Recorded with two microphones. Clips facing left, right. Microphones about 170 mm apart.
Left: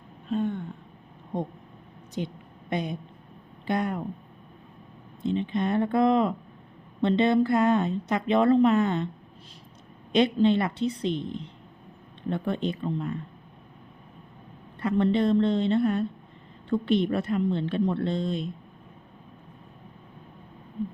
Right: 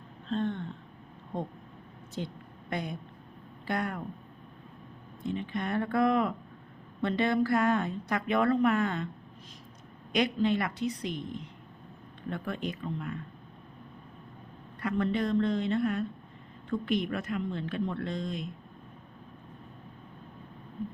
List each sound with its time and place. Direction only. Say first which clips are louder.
0.3 s a sound: left 3 dB; 10° left (ahead or behind)
1.3 s a woman's voice: left 4 dB; 20° left (ahead or behind)
5.2 s a woman's voice: left 7 dB; 25° left (ahead or behind)
10.1 s a woman's voice: left 6 dB; 25° left (ahead or behind)
14.8 s a woman's voice: left 6 dB; 25° left (ahead or behind)